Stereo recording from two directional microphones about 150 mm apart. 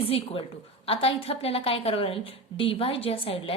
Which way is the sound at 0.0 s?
35° left (ahead or behind).